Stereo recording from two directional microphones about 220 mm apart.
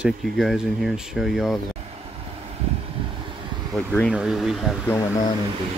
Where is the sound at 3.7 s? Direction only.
5° left (ahead or behind).